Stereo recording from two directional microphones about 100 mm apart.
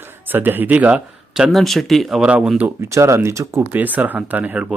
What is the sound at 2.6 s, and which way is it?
Speech, 30° right (ahead or behind).